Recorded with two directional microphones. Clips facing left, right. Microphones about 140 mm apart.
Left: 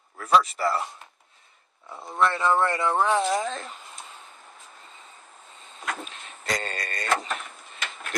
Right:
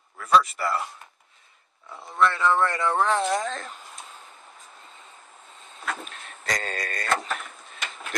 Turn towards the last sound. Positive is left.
turn(degrees=0)  # may be behind; listen again after turning